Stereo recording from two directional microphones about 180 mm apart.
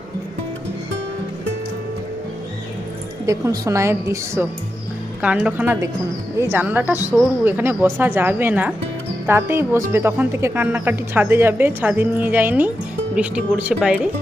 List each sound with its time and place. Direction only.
3.2 s a woman's voice: 20° right (ahead or behind)